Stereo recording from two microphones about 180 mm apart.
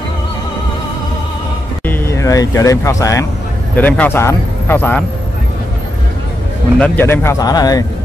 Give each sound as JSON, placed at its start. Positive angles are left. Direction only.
{"t": 1.9, "sound": "speech", "side_deg": 15}
{"t": 6.8, "sound": "speech", "side_deg": 10}